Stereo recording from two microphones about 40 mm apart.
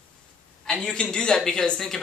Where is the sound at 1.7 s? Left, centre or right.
Centre.